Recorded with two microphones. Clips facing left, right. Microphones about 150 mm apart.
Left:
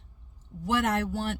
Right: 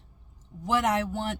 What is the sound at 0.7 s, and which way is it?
Speech, 15° right (ahead or behind).